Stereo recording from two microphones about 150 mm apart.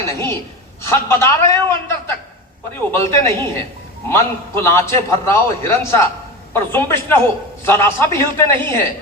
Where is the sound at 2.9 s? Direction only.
15° left (ahead or behind).